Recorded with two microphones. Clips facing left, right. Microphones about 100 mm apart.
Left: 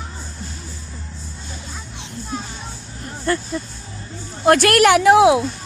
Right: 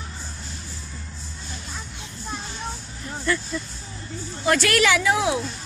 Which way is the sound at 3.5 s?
40° left (ahead or behind).